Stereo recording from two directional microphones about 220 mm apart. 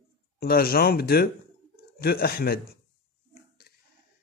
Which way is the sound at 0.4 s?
45° left (ahead or behind).